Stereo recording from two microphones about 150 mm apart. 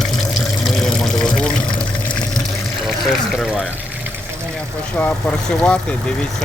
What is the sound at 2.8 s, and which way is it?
Speech, 5° right (ahead or behind).